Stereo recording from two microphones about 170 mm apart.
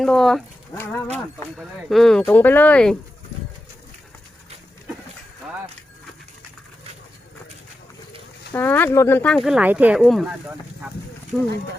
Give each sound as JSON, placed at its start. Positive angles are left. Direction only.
{"t": 0.0, "sound": "speech", "side_deg": 5}
{"t": 0.7, "sound": "speech", "side_deg": 15}
{"t": 1.1, "sound": "speech", "side_deg": 0}
{"t": 8.5, "sound": "speech", "side_deg": 10}